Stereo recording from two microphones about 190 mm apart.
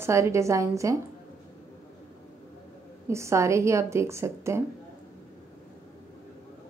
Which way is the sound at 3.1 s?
15° right (ahead or behind).